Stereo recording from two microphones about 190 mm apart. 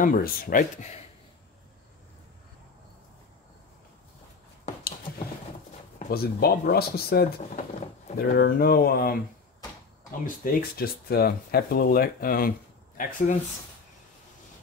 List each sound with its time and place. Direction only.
0.0 s speech: 45° left (ahead or behind)
6.0 s speech: 55° left (ahead or behind)
10.2 s speech: 50° left (ahead or behind)